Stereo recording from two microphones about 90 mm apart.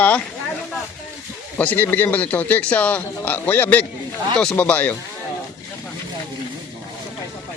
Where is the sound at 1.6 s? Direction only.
20° left (ahead or behind).